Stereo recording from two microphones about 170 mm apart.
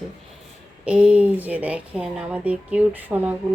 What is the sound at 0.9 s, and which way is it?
A woman's voice, 5° right (ahead or behind).